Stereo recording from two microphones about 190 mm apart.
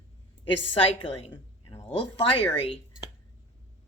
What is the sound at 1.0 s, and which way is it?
Speech, 30° left (ahead or behind).